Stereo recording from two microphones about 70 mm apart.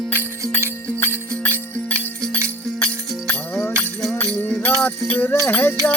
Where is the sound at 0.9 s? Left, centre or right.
Left.